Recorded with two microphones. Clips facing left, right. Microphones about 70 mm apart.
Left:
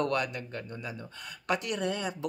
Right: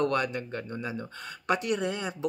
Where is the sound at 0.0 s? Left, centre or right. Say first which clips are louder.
Right 3 dB; right.